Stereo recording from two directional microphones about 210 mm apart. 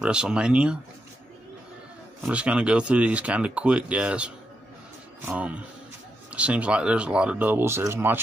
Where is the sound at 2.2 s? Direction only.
5° right (ahead or behind).